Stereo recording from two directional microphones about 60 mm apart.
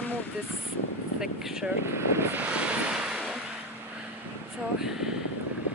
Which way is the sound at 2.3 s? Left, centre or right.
Centre.